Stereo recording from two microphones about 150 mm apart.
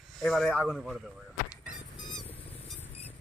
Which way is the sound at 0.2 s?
Centre (ahead or behind).